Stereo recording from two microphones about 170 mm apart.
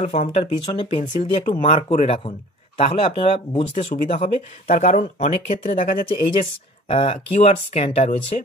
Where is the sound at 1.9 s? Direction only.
35° left (ahead or behind); by 5.8 s 50° left (ahead or behind).